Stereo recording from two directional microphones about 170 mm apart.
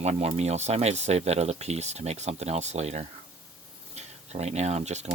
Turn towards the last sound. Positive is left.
turn(degrees=-40)  # may be behind; listen again after turning